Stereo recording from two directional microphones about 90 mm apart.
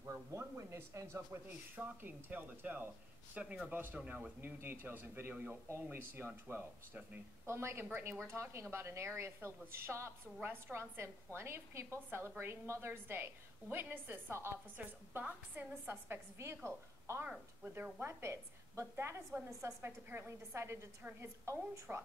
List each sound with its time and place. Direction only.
0.0 s a man's voice: 30° right (ahead or behind)
1.8 s a woman's voice: 20° right (ahead or behind)